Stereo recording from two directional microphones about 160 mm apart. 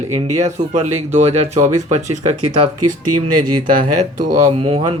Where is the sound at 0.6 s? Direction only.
50° right (ahead or behind).